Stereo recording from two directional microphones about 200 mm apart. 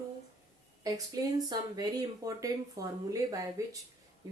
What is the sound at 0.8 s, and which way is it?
Speech, 20° right (ahead or behind).